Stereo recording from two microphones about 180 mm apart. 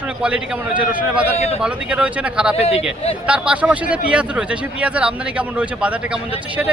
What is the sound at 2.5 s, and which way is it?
Speech, 35° left (ahead or behind).